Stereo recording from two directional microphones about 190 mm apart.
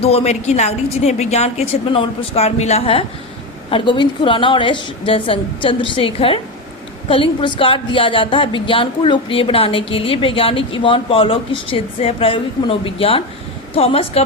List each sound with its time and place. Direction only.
0.0 s a woman's voice: 30° left (ahead or behind)